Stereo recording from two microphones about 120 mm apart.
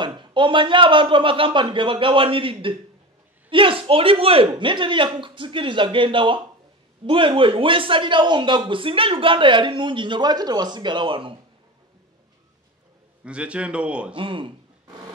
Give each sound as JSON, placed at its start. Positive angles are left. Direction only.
{"t": 0.0, "sound": "a man's voice", "side_deg": -40}
{"t": 13.2, "sound": "a man's voice", "side_deg": -10}
{"t": 14.1, "sound": "a man's voice", "side_deg": -45}